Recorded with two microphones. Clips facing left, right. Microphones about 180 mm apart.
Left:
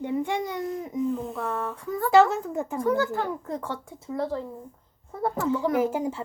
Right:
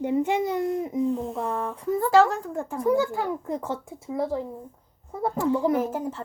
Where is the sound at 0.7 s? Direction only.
30° right (ahead or behind).